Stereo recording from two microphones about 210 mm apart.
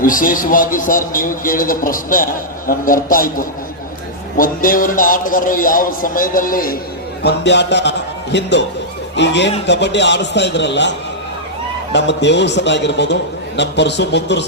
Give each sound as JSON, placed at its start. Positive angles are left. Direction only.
{"t": 0.0, "sound": "a man's voice", "side_deg": 40}
{"t": 7.2, "sound": "a man's voice", "side_deg": 55}